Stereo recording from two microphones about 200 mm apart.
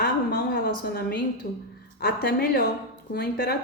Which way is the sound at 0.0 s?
50° left (ahead or behind).